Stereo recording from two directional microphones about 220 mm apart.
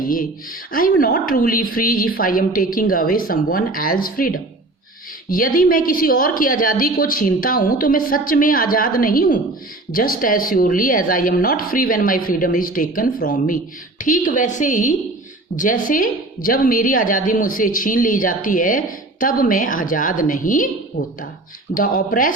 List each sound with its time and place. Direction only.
0.0 s a woman's voice: 40° left (ahead or behind)
21.8 s a woman's voice: 40° left (ahead or behind)